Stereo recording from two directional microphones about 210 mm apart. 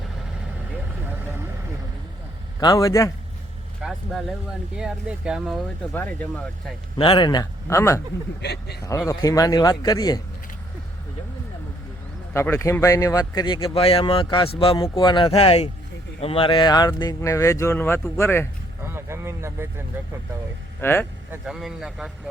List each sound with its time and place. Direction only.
2.6 s speech: 15° left (ahead or behind)
3.8 s speech: 5° right (ahead or behind)
5.9 s speech: 10° left (ahead or behind)
7.0 s speech: 25° left (ahead or behind)
8.4 s speech: 50° left (ahead or behind)
8.8 s speech: 15° left (ahead or behind)
12.3 s speech: 10° left (ahead or behind)
18.8 s a sound: 10° right (ahead or behind)
20.8 s speech: 10° left (ahead or behind)
21.4 s speech: centre (ahead or behind)